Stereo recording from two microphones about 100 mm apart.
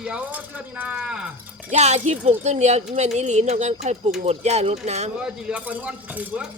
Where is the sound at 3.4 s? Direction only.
90° right.